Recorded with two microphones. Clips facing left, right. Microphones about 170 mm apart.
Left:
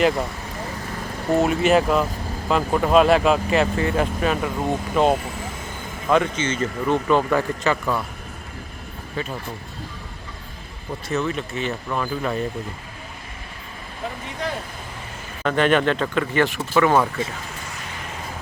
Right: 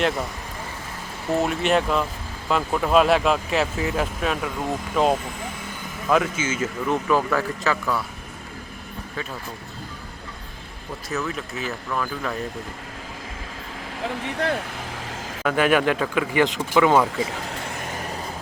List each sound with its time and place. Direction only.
0.0 s speech: centre (ahead or behind)
1.3 s speech: centre (ahead or behind)
11.1 s speech: centre (ahead or behind)
11.9 s speech: 10° left (ahead or behind)
14.2 s speech: 70° right (ahead or behind)
15.4 s speech: 5° right (ahead or behind)
17.5 s vehicle: 55° right (ahead or behind)